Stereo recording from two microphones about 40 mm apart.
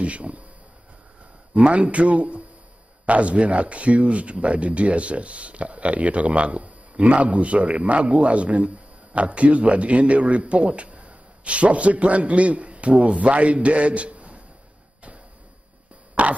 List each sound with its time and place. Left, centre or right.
0.0 s speech: right
1.5 s speech: right
16.2 s a sound: right